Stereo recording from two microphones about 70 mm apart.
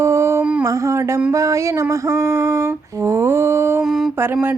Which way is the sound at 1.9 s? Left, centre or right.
Right.